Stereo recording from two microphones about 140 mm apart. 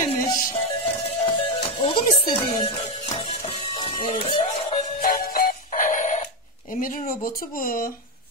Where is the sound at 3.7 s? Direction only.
40° left (ahead or behind).